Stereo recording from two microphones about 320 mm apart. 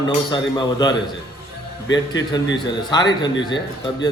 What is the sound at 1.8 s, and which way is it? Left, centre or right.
Speech, left.